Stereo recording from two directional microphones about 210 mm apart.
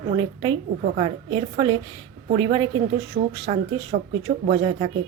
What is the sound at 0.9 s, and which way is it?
Speech, 25° right (ahead or behind).